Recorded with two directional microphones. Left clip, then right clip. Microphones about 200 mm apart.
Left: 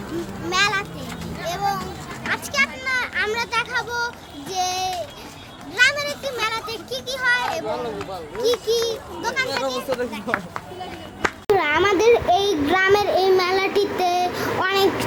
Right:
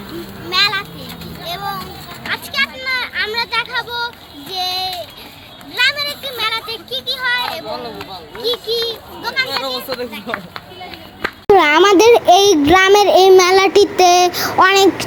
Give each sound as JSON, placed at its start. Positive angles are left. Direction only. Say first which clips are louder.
{"t": 0.5, "sound": "a sound", "louder": "right 5 dB", "side_deg": 10}
{"t": 1.5, "sound": "children playing", "louder": "even", "side_deg": 15}
{"t": 2.3, "sound": "a child's voice", "louder": "right 3 dB", "side_deg": 15}
{"t": 7.5, "sound": "a child's voice", "louder": "right 1 dB", "side_deg": -25}
{"t": 8.4, "sound": "a child's voice", "louder": "right 2 dB", "side_deg": 10}
{"t": 11.2, "sound": "a child's voice", "louder": "right 8 dB", "side_deg": -40}